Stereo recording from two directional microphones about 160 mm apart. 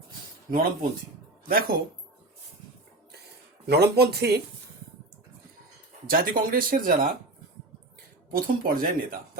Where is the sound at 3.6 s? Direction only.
90° right.